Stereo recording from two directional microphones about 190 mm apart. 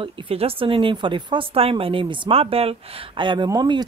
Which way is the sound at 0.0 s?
30° right (ahead or behind).